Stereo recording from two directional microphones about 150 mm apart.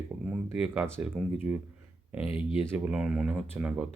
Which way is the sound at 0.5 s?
5° right (ahead or behind).